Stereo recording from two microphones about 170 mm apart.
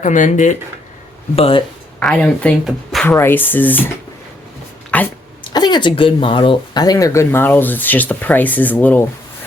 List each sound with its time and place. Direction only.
0.0 s speech: 50° left (ahead or behind)
1.4 s speech: 35° left (ahead or behind)
2.0 s speech: 5° left (ahead or behind)
3.1 s speech: 15° left (ahead or behind)
4.9 s dog: 10° left (ahead or behind)
5.4 s speech: 25° left (ahead or behind); by 9.0 s 10° left (ahead or behind)